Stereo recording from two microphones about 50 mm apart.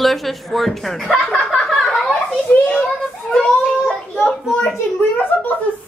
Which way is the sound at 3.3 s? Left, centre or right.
Centre.